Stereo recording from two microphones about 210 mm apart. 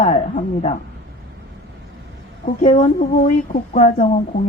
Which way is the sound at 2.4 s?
35° left (ahead or behind).